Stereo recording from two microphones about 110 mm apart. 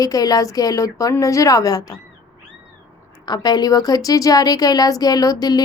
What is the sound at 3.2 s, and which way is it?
A woman's voice, 40° left (ahead or behind).